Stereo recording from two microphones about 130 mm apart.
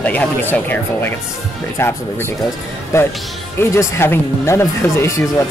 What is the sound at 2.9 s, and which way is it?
Speech, 20° left (ahead or behind).